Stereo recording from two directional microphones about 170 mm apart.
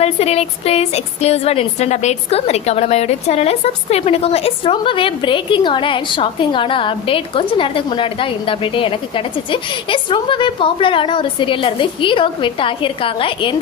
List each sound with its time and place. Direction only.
0.0 s a woman's voice: 35° left (ahead or behind)